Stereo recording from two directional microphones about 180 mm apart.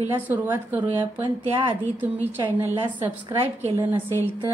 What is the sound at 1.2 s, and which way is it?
Speech, 25° right (ahead or behind).